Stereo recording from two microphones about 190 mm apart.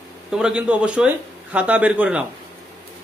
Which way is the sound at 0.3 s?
5° right (ahead or behind).